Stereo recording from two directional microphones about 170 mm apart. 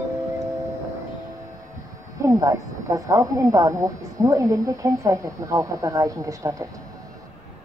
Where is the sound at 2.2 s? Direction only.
20° right (ahead or behind).